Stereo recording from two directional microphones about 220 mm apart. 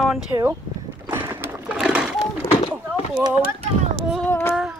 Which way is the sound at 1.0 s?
10° right (ahead or behind).